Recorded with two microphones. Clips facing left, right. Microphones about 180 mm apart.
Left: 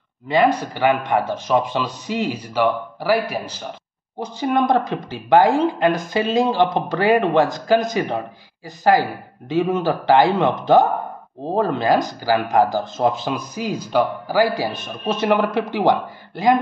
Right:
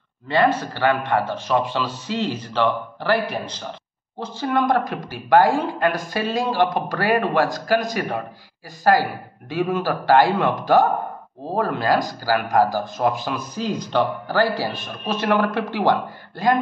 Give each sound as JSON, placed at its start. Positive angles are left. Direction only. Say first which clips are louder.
{"t": 0.3, "sound": "speech", "louder": "left 2 dB", "side_deg": 15}